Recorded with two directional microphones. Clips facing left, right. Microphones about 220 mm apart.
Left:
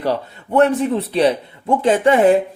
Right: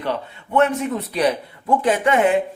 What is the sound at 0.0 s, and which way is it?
Speech, 35° left (ahead or behind).